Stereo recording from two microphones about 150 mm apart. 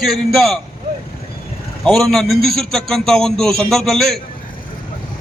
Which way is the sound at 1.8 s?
Centre (ahead or behind).